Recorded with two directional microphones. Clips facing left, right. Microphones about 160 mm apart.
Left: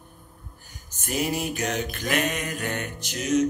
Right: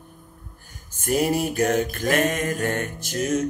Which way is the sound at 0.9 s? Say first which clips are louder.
Right 6 dB; 50° right (ahead or behind).